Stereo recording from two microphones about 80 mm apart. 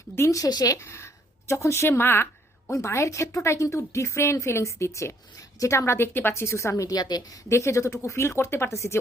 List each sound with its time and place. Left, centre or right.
0.2 s a woman's voice: left
0.9 s a woman's voice: left
7.4 s a woman's voice: left